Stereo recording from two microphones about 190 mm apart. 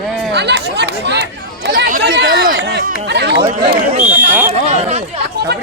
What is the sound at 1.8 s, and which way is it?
Speech, 50° right (ahead or behind).